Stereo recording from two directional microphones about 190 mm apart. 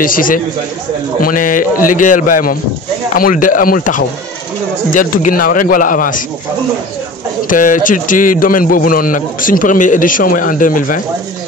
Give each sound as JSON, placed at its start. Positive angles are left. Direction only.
{"t": 0.0, "sound": "a man's voice", "side_deg": 45}
{"t": 7.4, "sound": "a man's voice", "side_deg": 45}